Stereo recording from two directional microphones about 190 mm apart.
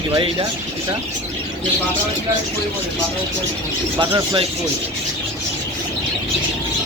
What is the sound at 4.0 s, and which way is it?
Speech, 25° right (ahead or behind).